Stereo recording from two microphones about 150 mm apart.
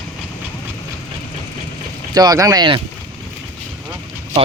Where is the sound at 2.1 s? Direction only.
25° right (ahead or behind).